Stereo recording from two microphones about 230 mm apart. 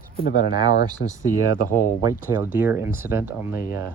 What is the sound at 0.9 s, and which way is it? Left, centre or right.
Speech, centre.